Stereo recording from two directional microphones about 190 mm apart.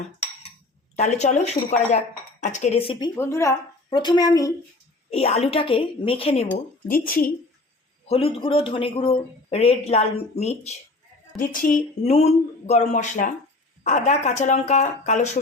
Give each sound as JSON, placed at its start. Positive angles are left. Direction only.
{"t": 0.9, "sound": "a man's voice", "side_deg": 40}
{"t": 3.2, "sound": "a woman's voice", "side_deg": 15}
{"t": 5.1, "sound": "a woman's voice", "side_deg": 35}
{"t": 6.9, "sound": "speech", "side_deg": 50}
{"t": 8.0, "sound": "a man's voice", "side_deg": 30}
{"t": 11.3, "sound": "speech", "side_deg": 45}
{"t": 12.1, "sound": "a man's voice", "side_deg": 35}